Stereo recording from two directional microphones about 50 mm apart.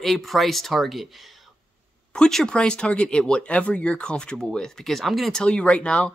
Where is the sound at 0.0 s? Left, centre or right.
Centre.